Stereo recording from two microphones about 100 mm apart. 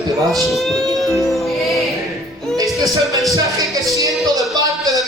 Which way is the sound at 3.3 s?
35° right (ahead or behind).